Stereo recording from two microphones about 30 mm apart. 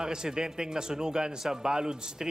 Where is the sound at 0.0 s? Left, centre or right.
Right.